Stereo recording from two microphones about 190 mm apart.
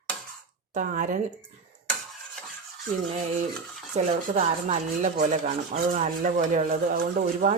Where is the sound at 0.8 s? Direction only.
45° right (ahead or behind).